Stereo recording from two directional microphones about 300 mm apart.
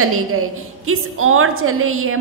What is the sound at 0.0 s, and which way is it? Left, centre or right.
A woman's voice, right.